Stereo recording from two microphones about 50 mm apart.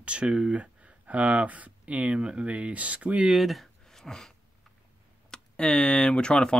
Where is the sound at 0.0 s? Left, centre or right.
Right.